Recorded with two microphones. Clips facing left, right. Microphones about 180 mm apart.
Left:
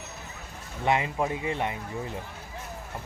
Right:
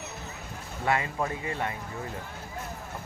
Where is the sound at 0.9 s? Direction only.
20° left (ahead or behind).